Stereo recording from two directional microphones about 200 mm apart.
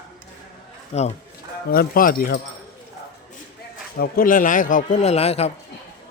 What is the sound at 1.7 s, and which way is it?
Speech, 45° left (ahead or behind).